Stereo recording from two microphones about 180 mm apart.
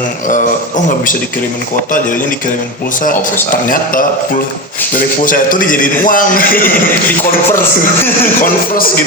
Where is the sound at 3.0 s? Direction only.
50° left (ahead or behind).